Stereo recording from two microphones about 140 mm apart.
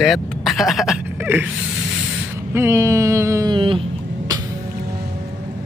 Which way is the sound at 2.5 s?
20° right (ahead or behind).